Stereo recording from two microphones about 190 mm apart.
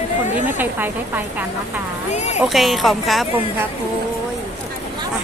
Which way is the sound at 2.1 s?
35° left (ahead or behind).